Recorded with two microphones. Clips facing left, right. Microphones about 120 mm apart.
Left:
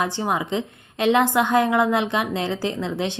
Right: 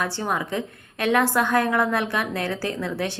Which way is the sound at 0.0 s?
20° left (ahead or behind).